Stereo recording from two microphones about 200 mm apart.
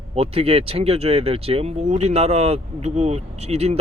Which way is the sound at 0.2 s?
30° right (ahead or behind).